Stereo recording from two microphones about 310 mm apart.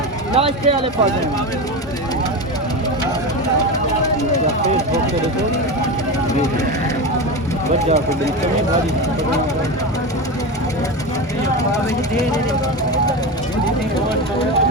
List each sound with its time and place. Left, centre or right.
0.3 s speech: centre